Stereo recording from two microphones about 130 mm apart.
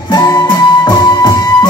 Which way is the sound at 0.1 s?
30° left (ahead or behind).